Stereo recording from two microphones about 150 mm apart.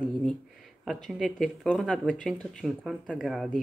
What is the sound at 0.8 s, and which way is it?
Speech, centre (ahead or behind).